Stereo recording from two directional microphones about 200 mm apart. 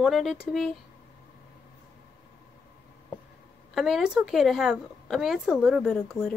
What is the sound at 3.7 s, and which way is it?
A woman's voice, centre (ahead or behind).